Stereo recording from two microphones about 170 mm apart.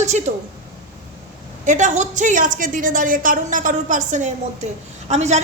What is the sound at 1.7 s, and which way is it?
A man's voice, 45° right (ahead or behind).